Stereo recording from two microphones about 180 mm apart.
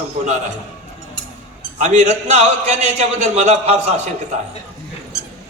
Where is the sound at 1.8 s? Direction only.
40° right (ahead or behind).